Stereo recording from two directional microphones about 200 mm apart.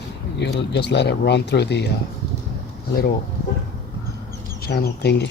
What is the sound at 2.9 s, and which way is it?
Speech, 50° left (ahead or behind).